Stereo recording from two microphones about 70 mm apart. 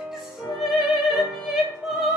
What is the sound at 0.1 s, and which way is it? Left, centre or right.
Opera, centre.